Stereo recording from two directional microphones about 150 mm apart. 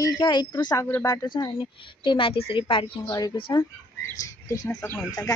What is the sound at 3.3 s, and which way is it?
Speech, 35° left (ahead or behind).